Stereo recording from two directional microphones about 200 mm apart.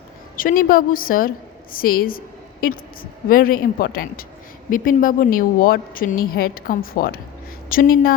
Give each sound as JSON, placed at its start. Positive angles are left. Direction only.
{"t": 0.3, "sound": "a woman's voice", "side_deg": 45}